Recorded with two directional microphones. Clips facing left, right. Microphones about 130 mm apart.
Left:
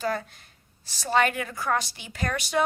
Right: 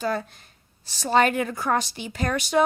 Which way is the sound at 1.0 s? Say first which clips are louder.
Right 4 dB; 25° right (ahead or behind).